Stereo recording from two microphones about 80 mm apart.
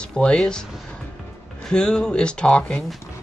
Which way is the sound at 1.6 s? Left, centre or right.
Centre.